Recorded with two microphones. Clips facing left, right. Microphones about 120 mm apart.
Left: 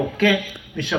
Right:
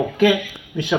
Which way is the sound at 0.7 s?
15° right (ahead or behind).